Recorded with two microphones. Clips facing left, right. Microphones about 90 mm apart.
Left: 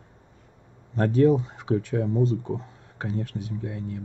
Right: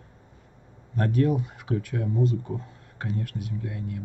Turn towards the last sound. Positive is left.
turn(degrees=30)  # may be behind; listen again after turning